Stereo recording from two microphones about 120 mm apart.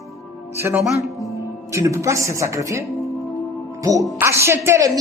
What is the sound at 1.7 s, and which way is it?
Speech, 25° right (ahead or behind).